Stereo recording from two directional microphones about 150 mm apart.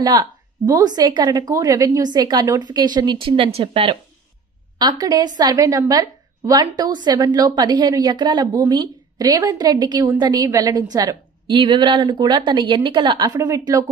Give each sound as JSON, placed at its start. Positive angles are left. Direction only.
{"t": 0.0, "sound": "a woman's voice", "side_deg": -30}